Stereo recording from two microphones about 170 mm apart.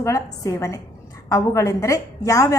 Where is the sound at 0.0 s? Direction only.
20° left (ahead or behind).